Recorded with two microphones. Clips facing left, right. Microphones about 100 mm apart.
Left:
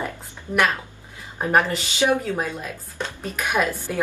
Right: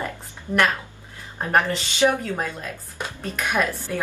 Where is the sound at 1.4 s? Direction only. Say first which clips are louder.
Left 1 dB; 10° left (ahead or behind).